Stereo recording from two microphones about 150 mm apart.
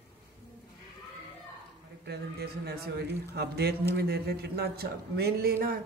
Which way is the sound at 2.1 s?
90° right.